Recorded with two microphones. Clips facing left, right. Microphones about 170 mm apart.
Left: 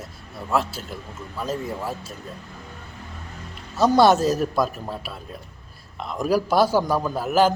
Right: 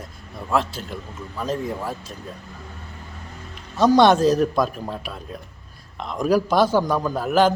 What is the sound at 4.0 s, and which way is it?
Speech, 5° left (ahead or behind).